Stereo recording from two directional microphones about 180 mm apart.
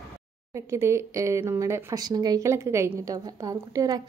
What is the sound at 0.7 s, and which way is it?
Speech, 15° right (ahead or behind).